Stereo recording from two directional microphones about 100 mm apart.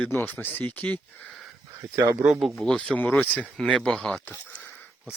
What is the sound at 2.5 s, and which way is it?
Speech, 5° left (ahead or behind).